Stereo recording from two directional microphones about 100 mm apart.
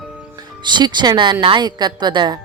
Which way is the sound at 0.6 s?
50° right (ahead or behind).